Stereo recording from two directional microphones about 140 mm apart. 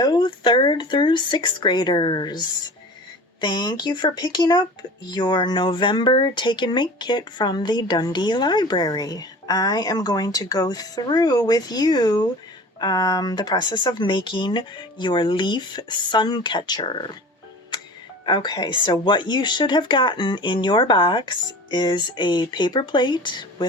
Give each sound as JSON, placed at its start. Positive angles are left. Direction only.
{"t": 0.0, "sound": "speech", "side_deg": 30}
{"t": 3.4, "sound": "speech", "side_deg": 30}
{"t": 18.3, "sound": "speech", "side_deg": 35}